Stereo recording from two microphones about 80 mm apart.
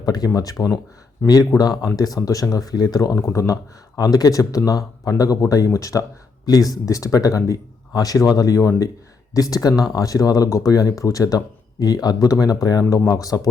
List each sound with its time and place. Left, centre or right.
0.0 s speech: left